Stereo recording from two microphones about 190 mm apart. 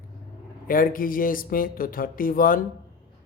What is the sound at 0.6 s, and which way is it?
Speech, 45° left (ahead or behind).